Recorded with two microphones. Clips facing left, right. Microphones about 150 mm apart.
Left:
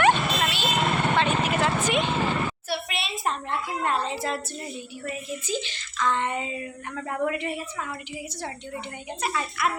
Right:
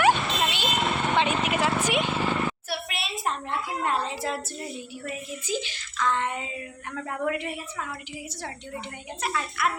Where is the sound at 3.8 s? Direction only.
5° right (ahead or behind).